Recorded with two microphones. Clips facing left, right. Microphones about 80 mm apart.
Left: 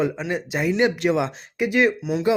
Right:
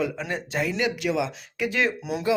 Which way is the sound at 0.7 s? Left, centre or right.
Left.